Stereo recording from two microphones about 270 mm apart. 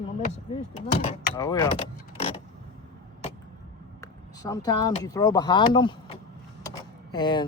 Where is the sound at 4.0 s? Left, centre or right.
Centre.